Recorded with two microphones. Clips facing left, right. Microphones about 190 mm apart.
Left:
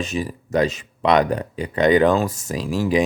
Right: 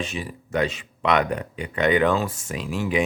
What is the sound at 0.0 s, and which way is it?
Speech, 40° left (ahead or behind).